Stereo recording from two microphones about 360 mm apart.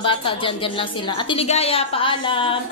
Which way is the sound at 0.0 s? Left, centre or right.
Centre.